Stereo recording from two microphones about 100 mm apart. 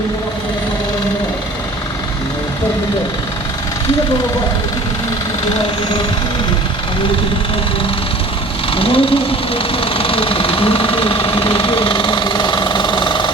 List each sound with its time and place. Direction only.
8.7 s speech: 65° left (ahead or behind)